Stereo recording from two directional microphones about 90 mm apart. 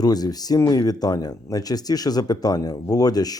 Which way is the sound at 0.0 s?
45° left (ahead or behind).